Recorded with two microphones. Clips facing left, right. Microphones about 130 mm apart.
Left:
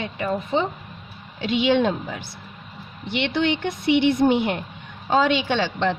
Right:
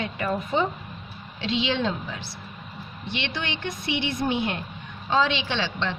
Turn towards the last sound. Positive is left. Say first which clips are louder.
# left 6 dB
turn(degrees=50)  # may be behind; listen again after turning